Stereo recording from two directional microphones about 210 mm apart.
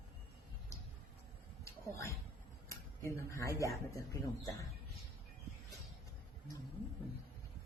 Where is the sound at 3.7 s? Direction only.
15° left (ahead or behind).